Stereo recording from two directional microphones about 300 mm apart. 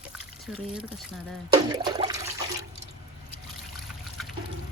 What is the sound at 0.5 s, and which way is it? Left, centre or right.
Speech, centre.